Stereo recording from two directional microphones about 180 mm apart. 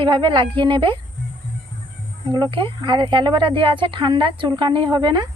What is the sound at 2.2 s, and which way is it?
Speech, 25° right (ahead or behind).